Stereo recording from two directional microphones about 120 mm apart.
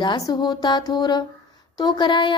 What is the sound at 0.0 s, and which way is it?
A woman's voice, 35° left (ahead or behind).